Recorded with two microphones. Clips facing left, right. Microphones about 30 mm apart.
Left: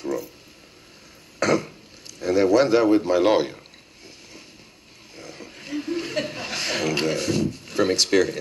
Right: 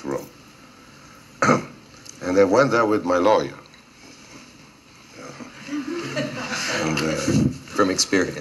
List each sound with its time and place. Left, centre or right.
1.4 s throat clearing: left
2.1 s a man's voice: left
5.1 s a sound: left